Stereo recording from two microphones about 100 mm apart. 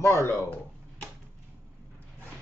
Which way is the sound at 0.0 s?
30° left (ahead or behind).